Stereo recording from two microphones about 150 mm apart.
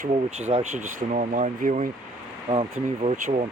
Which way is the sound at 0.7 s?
55° right (ahead or behind).